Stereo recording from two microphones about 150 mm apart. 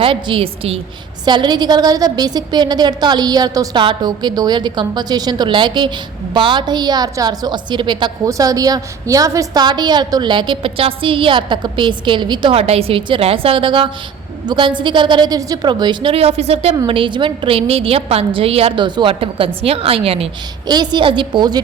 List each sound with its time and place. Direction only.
0.0 s a woman's voice: 35° right (ahead or behind)
1.2 s a woman's voice: 30° right (ahead or behind)
20.7 s a woman's voice: 30° right (ahead or behind)